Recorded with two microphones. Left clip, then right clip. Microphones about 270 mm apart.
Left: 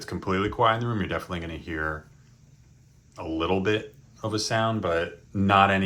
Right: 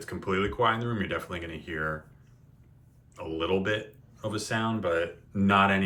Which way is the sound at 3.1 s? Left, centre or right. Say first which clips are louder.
Left 2 dB; centre.